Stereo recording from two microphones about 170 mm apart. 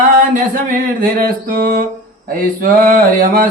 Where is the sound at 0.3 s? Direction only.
50° right (ahead or behind).